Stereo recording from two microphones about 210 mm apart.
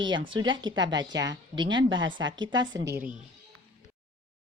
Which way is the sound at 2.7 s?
60° right (ahead or behind).